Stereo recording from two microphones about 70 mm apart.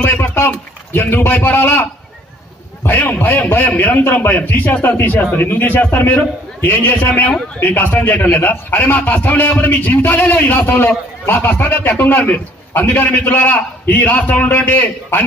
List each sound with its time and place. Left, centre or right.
0.0 s a man's voice: left